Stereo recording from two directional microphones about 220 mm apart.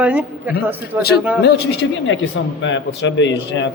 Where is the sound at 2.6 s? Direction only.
60° left (ahead or behind).